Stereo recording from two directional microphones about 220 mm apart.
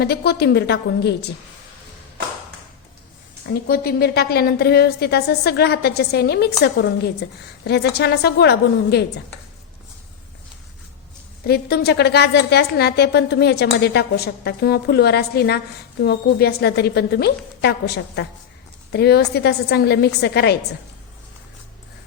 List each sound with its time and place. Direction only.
0.0 s a woman's voice: 45° left (ahead or behind)
3.4 s a woman's voice: 45° left (ahead or behind)
11.4 s a woman's voice: 45° left (ahead or behind)